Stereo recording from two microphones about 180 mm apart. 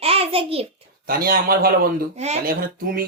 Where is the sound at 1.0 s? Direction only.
55° right (ahead or behind).